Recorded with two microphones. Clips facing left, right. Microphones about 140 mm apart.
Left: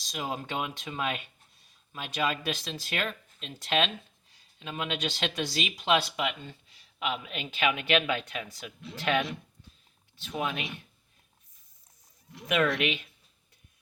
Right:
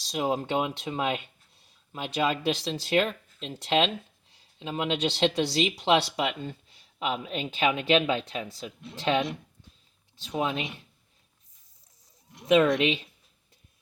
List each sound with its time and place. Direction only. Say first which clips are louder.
0.0 s speech: right 7 dB; 30° right (ahead or behind)
12.5 s speech: right 6 dB; 20° right (ahead or behind)